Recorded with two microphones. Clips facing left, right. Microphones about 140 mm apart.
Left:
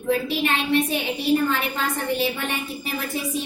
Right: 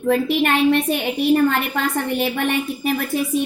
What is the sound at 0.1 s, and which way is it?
A woman's voice, 55° right (ahead or behind).